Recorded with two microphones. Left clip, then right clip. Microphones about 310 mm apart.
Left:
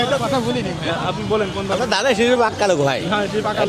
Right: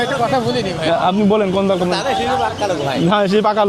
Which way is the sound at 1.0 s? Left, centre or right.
Right.